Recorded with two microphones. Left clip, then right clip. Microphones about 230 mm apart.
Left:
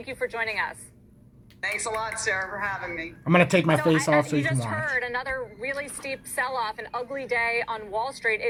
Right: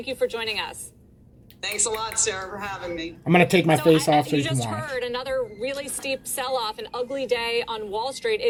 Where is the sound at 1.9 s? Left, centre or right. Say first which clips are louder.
Left 1 dB; right.